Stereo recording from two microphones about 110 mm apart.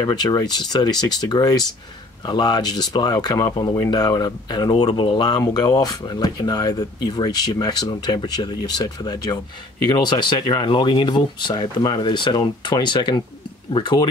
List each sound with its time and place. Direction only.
0.0 s speech: 40° left (ahead or behind)